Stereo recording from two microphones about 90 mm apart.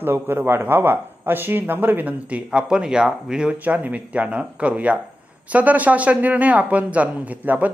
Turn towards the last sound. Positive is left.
turn(degrees=-15)  # may be behind; listen again after turning